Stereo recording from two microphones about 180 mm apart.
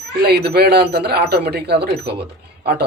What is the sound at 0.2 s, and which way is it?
Speech, 60° right (ahead or behind).